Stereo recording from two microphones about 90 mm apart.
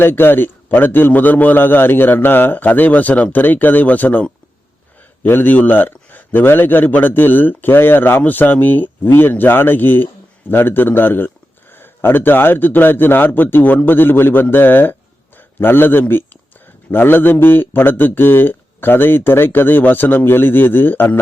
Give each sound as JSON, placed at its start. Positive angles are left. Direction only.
{"t": 0.0, "sound": "a man's voice", "side_deg": 25}